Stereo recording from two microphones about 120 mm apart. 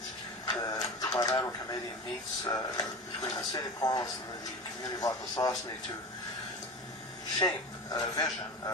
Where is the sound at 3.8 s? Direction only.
35° left (ahead or behind).